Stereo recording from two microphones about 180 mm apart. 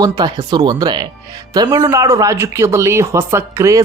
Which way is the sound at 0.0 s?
20° right (ahead or behind).